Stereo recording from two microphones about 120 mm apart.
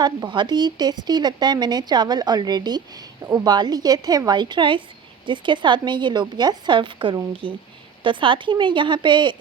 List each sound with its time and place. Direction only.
0.0 s speech: 40° right (ahead or behind)
3.2 s a woman's voice: 25° right (ahead or behind)
3.5 s a woman's voice: 35° right (ahead or behind)